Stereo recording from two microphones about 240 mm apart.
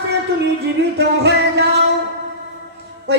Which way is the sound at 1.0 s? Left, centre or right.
Right.